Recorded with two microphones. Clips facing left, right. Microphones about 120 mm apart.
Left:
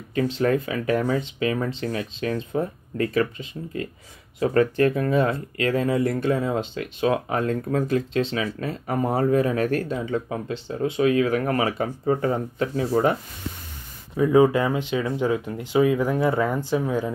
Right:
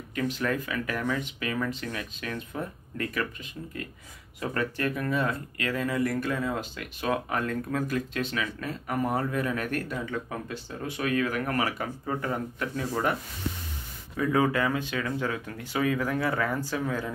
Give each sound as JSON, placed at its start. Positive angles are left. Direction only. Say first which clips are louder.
{"t": 0.1, "sound": "speech", "louder": "left 7 dB", "side_deg": 30}